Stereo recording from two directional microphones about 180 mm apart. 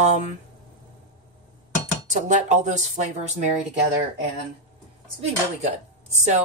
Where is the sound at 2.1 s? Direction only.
40° right (ahead or behind).